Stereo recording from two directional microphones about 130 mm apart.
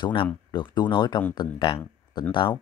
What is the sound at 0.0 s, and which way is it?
Speech, 40° left (ahead or behind).